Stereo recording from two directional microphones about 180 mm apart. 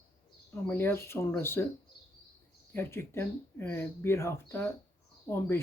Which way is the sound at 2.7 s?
15° left (ahead or behind).